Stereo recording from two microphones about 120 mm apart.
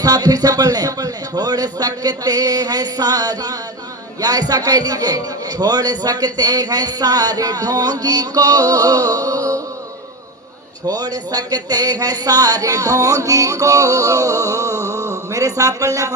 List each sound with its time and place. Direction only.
0.0 s a man's voice: 30° right (ahead or behind)
10.8 s speech: 30° right (ahead or behind)